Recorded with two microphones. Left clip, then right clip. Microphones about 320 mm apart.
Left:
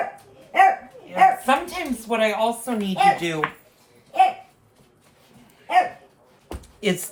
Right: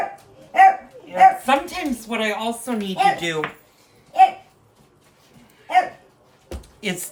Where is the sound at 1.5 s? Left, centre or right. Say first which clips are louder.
Right 1 dB; centre.